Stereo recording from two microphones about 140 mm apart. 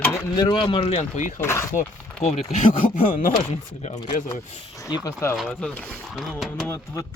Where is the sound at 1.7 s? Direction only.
60° left (ahead or behind).